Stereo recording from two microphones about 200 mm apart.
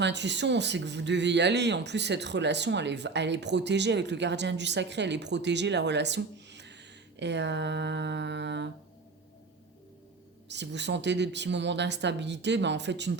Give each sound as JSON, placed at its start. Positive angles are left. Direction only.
{"t": 0.0, "sound": "speech", "side_deg": -60}
{"t": 10.5, "sound": "speech", "side_deg": -60}